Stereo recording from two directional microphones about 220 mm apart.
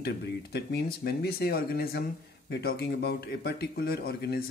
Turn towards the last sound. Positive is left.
turn(degrees=45)  # may be behind; listen again after turning